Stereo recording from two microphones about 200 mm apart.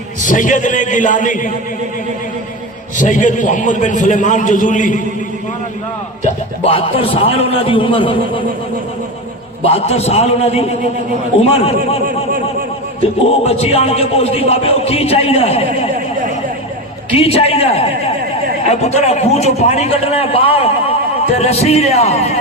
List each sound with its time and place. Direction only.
0.3 s a man's voice: 40° left (ahead or behind)
3.0 s a man's voice: 40° left (ahead or behind)
6.7 s a man's voice: 30° left (ahead or behind)
9.6 s a man's voice: 30° left (ahead or behind)
13.0 s a man's voice: 30° left (ahead or behind)
17.2 s a man's voice: 30° left (ahead or behind)